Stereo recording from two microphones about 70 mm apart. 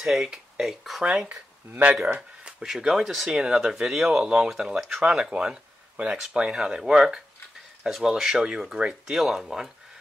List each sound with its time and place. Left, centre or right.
0.0 s speech: centre
1.0 s speech: centre
2.6 s speech: centre